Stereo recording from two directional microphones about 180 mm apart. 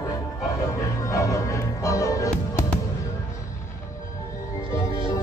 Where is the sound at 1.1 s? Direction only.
20° left (ahead or behind).